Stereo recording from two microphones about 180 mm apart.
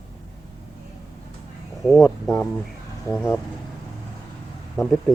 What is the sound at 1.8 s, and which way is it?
Speech, centre (ahead or behind).